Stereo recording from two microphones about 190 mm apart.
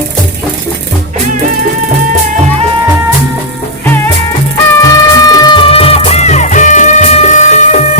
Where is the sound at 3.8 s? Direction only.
10° left (ahead or behind).